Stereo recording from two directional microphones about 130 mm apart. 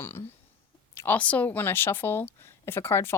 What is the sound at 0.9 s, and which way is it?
Speech, 15° left (ahead or behind).